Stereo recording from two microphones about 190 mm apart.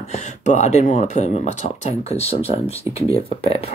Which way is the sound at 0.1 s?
35° left (ahead or behind).